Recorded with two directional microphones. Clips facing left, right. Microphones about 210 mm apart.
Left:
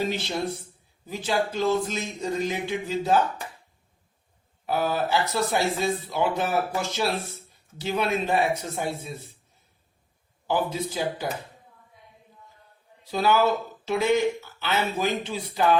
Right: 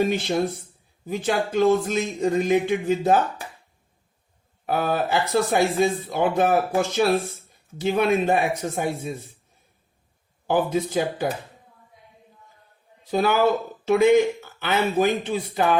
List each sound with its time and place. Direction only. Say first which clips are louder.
0.0 s speech: right 6 dB; 55° right (ahead or behind)
4.6 s speech: right 2 dB; 55° right (ahead or behind)
10.4 s speech: right 4 dB; 55° right (ahead or behind)
13.1 s speech: right 2 dB; 50° right (ahead or behind)